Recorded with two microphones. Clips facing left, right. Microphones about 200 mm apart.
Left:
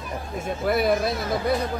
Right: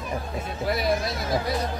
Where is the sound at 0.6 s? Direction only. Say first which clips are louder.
Left 4 dB; 55° left (ahead or behind).